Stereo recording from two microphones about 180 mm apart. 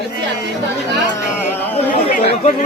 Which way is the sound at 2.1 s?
50° left (ahead or behind).